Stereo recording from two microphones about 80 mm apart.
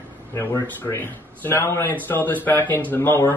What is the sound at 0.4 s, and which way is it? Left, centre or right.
Speech, left.